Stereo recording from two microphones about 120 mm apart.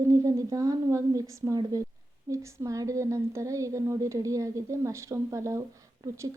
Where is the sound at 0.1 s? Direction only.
30° right (ahead or behind).